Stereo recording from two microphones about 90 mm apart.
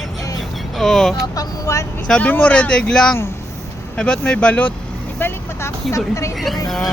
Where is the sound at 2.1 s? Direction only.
15° left (ahead or behind).